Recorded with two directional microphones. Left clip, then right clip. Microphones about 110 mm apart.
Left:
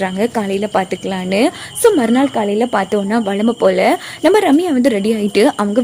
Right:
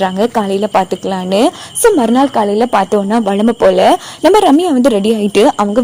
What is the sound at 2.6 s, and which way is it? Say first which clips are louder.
Speech: right 4 dB; 40° right (ahead or behind).